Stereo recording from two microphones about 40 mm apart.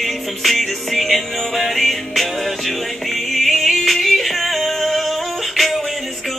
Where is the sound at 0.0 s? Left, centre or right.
Centre.